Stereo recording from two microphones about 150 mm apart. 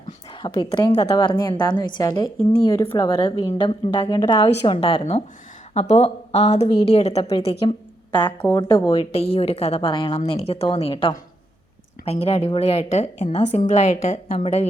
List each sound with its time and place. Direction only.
0.4 s a woman's voice: 30° left (ahead or behind)
8.1 s a woman's voice: 30° left (ahead or behind)
8.4 s speech: 15° left (ahead or behind)
8.9 s a woman's voice: 40° left (ahead or behind)